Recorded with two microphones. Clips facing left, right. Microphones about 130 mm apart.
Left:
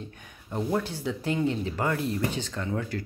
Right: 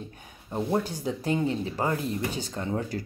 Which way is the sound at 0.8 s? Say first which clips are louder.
Right 1 dB; 40° right (ahead or behind).